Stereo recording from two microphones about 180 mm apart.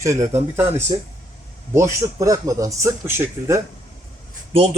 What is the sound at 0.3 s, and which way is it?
Speech, 15° right (ahead or behind).